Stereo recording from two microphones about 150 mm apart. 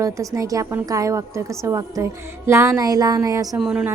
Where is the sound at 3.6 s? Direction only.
5° right (ahead or behind).